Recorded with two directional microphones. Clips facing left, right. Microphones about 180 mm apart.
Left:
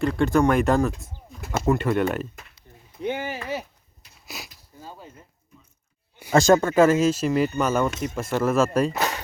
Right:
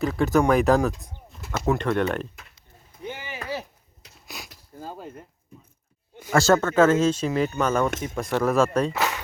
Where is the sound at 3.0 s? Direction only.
60° left (ahead or behind).